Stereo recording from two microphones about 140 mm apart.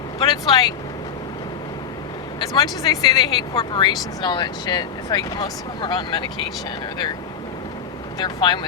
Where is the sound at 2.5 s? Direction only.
30° left (ahead or behind).